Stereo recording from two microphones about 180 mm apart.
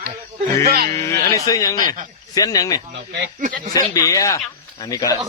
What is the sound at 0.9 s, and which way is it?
Speech, 20° left (ahead or behind).